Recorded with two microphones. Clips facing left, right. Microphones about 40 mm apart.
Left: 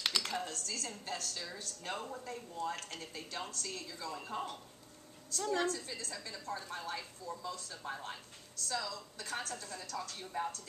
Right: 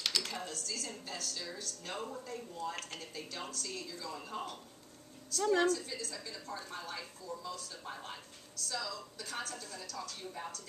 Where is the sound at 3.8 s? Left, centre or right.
Centre.